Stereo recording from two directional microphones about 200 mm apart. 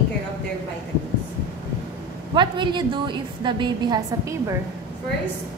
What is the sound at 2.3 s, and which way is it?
A woman's voice, 25° right (ahead or behind).